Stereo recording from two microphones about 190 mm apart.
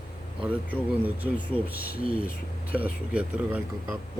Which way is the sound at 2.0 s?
30° right (ahead or behind).